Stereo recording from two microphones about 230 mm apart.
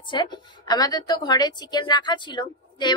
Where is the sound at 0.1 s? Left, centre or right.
Centre.